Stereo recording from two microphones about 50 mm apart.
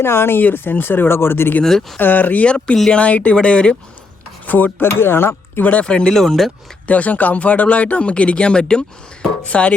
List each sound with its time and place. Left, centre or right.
0.0 s speech: left
1.6 s speech: centre
2.0 s speech: left
4.4 s speech: left
4.9 s speech: left
5.3 s speech: left
5.8 s speech: centre
6.8 s speech: left